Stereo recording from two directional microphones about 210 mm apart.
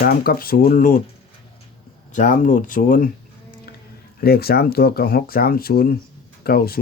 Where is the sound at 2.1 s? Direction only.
35° left (ahead or behind).